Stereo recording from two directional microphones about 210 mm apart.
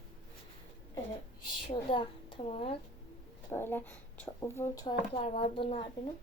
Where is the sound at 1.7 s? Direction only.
25° left (ahead or behind).